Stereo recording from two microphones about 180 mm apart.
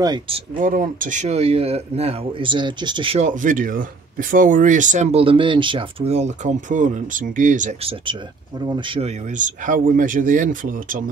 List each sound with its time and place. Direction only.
0.0 s speech: 25° right (ahead or behind)
0.6 s speech: 50° right (ahead or behind); by 3.3 s 30° right (ahead or behind)
3.3 s speech: 45° right (ahead or behind); by 9.1 s 30° right (ahead or behind)
9.3 s speech: 45° right (ahead or behind)